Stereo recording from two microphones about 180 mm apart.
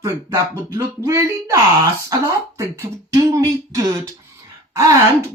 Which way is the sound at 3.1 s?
20° right (ahead or behind).